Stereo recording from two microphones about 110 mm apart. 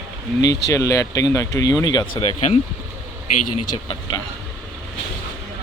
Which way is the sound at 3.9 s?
40° left (ahead or behind).